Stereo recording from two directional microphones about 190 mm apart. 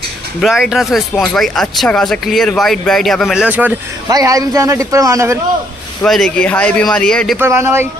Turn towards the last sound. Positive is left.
turn(degrees=-15)  # may be behind; listen again after turning